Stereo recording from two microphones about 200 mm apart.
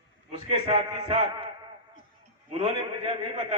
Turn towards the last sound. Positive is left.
turn(degrees=-30)  # may be behind; listen again after turning